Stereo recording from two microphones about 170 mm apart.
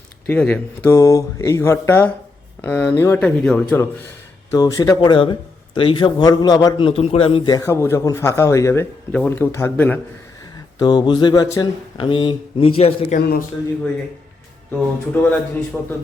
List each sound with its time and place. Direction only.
0.3 s speech: 10° left (ahead or behind)
4.5 s speech: 20° left (ahead or behind)
7.5 s speech: 15° left (ahead or behind)
10.8 s speech: 25° left (ahead or behind)
13.1 s a man's voice: 65° left (ahead or behind)
15.1 s speech: 10° left (ahead or behind)